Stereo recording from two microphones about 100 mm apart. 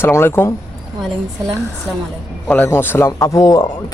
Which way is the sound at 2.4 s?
20° left (ahead or behind).